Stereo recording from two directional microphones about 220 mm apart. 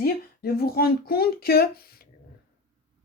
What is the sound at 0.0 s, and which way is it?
Speech, 45° left (ahead or behind).